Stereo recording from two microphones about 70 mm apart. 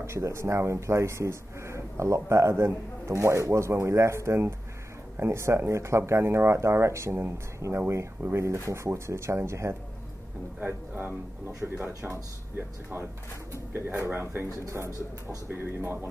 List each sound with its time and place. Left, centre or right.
0.0 s speech: right
10.6 s speech: right